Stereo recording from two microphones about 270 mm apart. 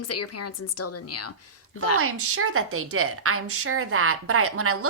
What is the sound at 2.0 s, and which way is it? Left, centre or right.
Speech, right.